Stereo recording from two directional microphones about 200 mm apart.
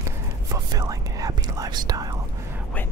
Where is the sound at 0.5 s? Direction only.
20° right (ahead or behind).